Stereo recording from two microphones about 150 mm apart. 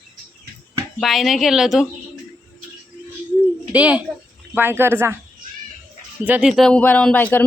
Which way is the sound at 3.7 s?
10° right (ahead or behind).